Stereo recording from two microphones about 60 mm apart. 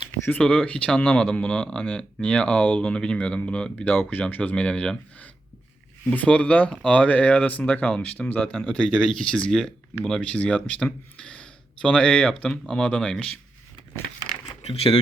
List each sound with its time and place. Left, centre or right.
0.1 s speech: left
3.9 s speech: left; by 12.8 s centre
12.8 s speech: centre